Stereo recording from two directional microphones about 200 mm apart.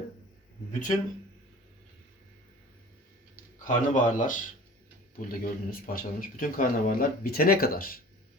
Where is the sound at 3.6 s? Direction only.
40° left (ahead or behind).